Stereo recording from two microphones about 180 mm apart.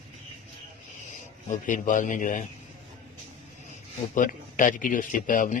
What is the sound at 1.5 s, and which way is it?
Speech, 45° left (ahead or behind).